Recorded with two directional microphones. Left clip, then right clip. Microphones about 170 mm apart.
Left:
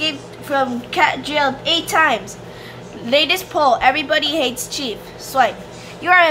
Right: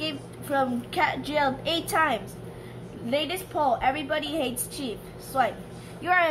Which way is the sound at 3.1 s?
15° left (ahead or behind).